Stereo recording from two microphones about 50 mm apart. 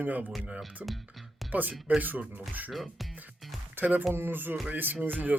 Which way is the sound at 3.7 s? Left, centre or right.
Right.